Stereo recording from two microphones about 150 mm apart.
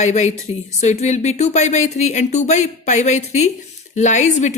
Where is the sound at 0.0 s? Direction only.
50° left (ahead or behind).